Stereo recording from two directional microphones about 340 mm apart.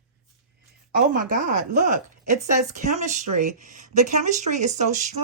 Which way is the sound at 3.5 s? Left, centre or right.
Right.